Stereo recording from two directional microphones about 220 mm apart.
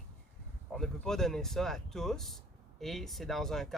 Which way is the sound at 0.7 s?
Centre (ahead or behind).